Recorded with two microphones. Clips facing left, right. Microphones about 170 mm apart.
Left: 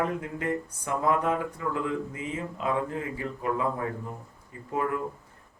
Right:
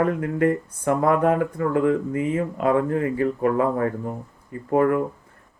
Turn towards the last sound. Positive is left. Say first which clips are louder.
# right 10 dB
turn(degrees=-60)  # may be behind; listen again after turning